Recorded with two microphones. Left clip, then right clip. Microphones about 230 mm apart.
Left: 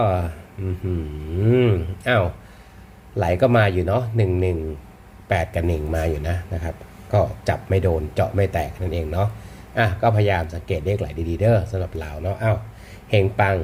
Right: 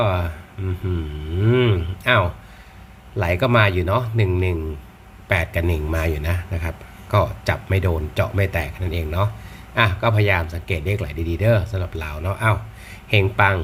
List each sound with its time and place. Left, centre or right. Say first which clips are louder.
0.0 s a man's voice: even; centre
1.4 s a man's voice: even; centre